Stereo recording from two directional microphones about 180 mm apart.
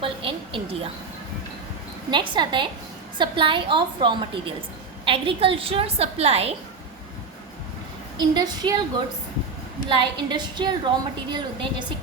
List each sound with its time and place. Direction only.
0.0 s a sound: 30° right (ahead or behind)
2.0 s a woman's voice: 25° right (ahead or behind)
8.2 s a woman's voice: 20° right (ahead or behind)
9.9 s a woman's voice: 25° right (ahead or behind)